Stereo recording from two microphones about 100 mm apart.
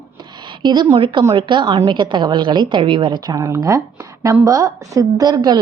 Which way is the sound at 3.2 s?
35° right (ahead or behind).